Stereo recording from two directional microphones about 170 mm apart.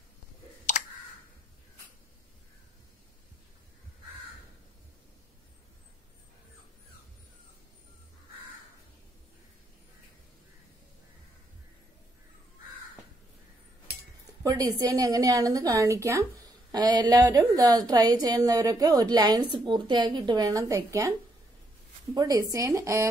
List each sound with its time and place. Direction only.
0.7 s clicking: 45° left (ahead or behind)
14.4 s a woman's voice: 20° right (ahead or behind)
22.1 s a woman's voice: 20° right (ahead or behind)